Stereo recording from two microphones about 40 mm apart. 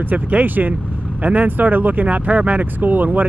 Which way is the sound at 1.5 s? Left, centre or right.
Right.